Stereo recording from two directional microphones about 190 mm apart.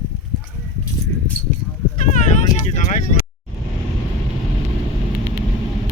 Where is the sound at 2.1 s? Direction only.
40° left (ahead or behind).